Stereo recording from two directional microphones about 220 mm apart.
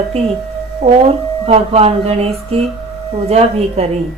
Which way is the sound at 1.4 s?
30° right (ahead or behind).